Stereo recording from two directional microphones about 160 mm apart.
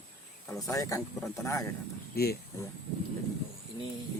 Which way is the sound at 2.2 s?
75° left (ahead or behind).